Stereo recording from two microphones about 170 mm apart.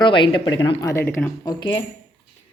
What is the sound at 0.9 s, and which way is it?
Speech, 15° left (ahead or behind).